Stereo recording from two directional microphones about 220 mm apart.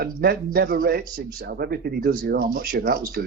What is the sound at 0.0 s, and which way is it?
Speech, 45° right (ahead or behind).